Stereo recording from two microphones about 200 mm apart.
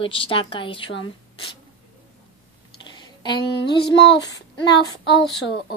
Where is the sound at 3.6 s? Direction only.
60° left (ahead or behind).